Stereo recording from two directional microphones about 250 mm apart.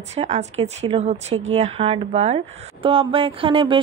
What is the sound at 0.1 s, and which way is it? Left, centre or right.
A woman's voice, right.